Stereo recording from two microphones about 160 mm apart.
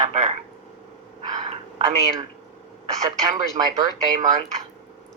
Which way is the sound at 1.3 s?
45° right (ahead or behind).